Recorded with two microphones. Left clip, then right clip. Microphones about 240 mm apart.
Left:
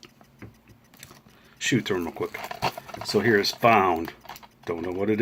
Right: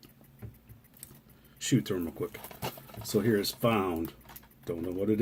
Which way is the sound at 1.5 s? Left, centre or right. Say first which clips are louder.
Left 6 dB; centre.